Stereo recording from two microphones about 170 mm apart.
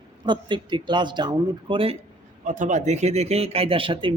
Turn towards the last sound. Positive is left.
turn(degrees=-30)  # may be behind; listen again after turning